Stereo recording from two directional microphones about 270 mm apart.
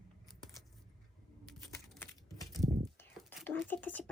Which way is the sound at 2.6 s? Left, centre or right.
Centre.